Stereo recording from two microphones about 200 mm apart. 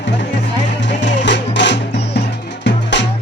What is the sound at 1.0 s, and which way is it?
Music, 60° left (ahead or behind).